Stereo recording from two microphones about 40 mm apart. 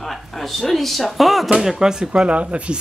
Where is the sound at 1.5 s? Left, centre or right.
Centre.